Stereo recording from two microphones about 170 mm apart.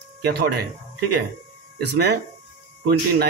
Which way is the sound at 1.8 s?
75° right (ahead or behind).